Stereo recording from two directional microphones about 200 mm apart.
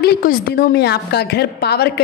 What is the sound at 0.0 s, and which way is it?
A woman's voice, 50° left (ahead or behind).